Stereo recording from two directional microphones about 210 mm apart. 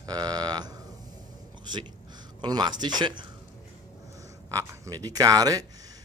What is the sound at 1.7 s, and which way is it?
Speech, 20° right (ahead or behind).